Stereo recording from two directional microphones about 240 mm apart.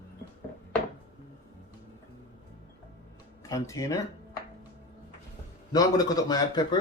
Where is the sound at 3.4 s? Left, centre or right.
Centre.